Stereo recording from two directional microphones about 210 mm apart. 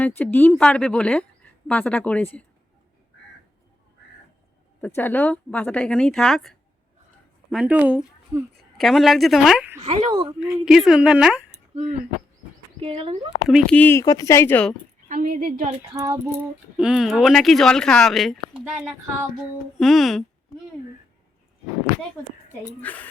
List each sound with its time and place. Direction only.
0.0 s speech: 10° left (ahead or behind)
4.9 s speech: 10° left (ahead or behind); by 9.8 s 10° right (ahead or behind)
9.8 s a woman's voice: 30° right (ahead or behind)
10.1 s a woman's voice: 20° right (ahead or behind)
10.7 s speech: centre (ahead or behind)
11.5 s a sound: 30° right (ahead or behind)
12.8 s speech: 30° right (ahead or behind)
13.7 s speech: 10° left (ahead or behind)
15.1 s a woman's voice: 40° right (ahead or behind)
15.9 s speech: 15° right (ahead or behind); by 20.2 s centre (ahead or behind)
22.8 s speech: 5° left (ahead or behind)